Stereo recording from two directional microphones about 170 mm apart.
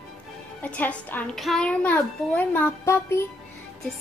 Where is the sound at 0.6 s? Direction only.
10° left (ahead or behind).